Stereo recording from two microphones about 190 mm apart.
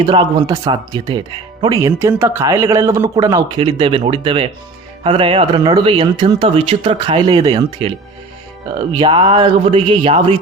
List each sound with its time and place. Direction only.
0.0 s speech: 25° right (ahead or behind)
1.8 s speech: 15° right (ahead or behind)
3.5 s speech: 30° right (ahead or behind)